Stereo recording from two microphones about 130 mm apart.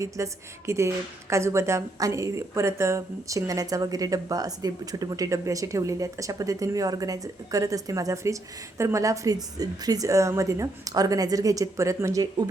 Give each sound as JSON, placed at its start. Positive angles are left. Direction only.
{"t": 0.0, "sound": "a woman's voice", "side_deg": -20}